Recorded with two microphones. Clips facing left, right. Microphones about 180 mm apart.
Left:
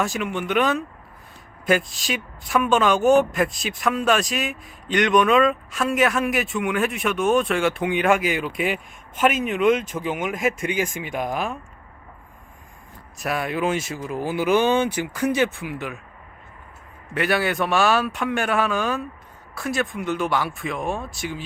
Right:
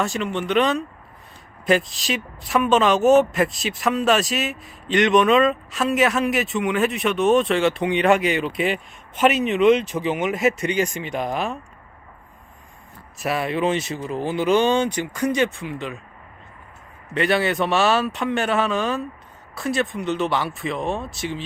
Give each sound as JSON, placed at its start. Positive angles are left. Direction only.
{"t": 0.0, "sound": "a woman's voice", "side_deg": 0}
{"t": 9.1, "sound": "speech", "side_deg": 50}
{"t": 10.6, "sound": "a woman's voice", "side_deg": 5}
{"t": 13.1, "sound": "speech", "side_deg": 0}
{"t": 17.2, "sound": "a woman's voice", "side_deg": 0}